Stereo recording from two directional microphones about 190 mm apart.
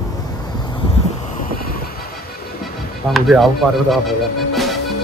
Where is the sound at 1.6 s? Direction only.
50° left (ahead or behind).